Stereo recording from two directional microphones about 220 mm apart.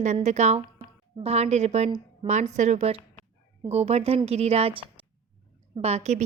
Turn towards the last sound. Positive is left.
turn(degrees=-30)  # may be behind; listen again after turning